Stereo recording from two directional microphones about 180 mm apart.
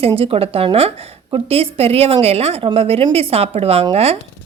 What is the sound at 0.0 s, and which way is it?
A woman's voice, 30° right (ahead or behind).